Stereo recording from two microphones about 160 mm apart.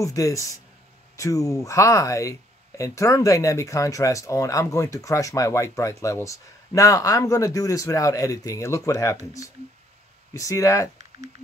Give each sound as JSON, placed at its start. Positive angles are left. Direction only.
{"t": 0.0, "sound": "speech", "side_deg": 20}
{"t": 10.3, "sound": "speech", "side_deg": 20}